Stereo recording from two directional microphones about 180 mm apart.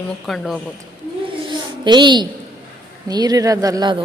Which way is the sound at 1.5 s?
25° right (ahead or behind).